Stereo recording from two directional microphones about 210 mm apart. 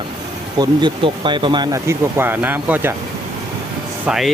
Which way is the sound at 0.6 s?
20° right (ahead or behind).